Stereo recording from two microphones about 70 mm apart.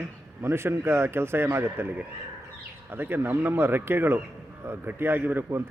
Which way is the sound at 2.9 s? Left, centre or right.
Right.